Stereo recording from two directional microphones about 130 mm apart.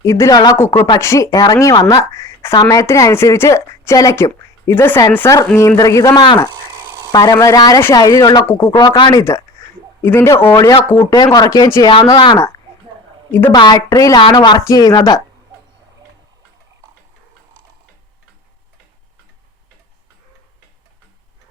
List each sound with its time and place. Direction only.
0.0 s speech: 25° left (ahead or behind)
0.5 s speech: 20° left (ahead or behind)
6.1 s speech: 35° left (ahead or behind)
6.7 s a sound: 30° right (ahead or behind)
7.1 s speech: 30° left (ahead or behind)
8.6 s speech: 45° left (ahead or behind)
9.1 s speech: 20° left (ahead or behind)
13.5 s speech: 30° left (ahead or behind)
14.2 s speech: 40° left (ahead or behind)